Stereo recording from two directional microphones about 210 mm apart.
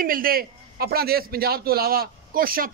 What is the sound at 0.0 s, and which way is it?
A man's voice, 45° right (ahead or behind).